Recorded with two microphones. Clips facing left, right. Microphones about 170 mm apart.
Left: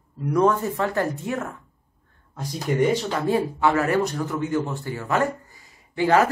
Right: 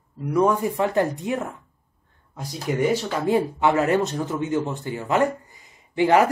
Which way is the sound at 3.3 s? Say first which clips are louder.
Right 1 dB; 20° right (ahead or behind).